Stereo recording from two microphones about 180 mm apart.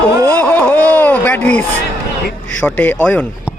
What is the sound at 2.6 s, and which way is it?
Speech, 10° left (ahead or behind).